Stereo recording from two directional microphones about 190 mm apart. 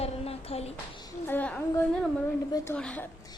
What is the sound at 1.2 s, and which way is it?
A child's voice, 10° left (ahead or behind).